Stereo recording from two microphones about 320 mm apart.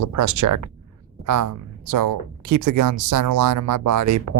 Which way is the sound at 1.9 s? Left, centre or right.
Right.